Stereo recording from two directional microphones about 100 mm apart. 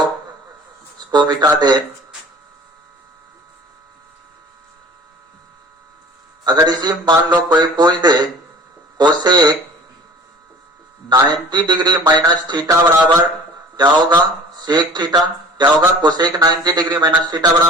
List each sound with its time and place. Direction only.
0.9 s speech: 45° right (ahead or behind)
6.4 s a man's voice: 45° right (ahead or behind)
11.1 s a man's voice: 45° right (ahead or behind)